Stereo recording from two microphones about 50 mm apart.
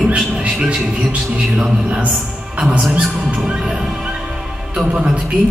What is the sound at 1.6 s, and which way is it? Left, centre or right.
A man's voice, right.